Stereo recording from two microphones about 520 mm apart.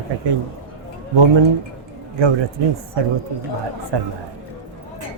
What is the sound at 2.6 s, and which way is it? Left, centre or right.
Speech, right.